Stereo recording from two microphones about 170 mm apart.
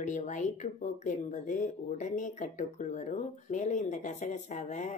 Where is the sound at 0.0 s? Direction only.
45° left (ahead or behind).